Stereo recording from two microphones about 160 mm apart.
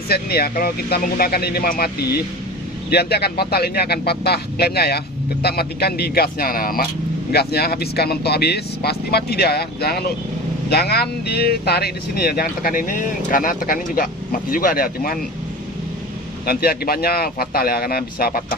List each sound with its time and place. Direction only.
0.1 s speech: 75° left (ahead or behind)
7.3 s speech: 80° left; by 15.2 s 65° left (ahead or behind)
16.5 s speech: 70° left (ahead or behind)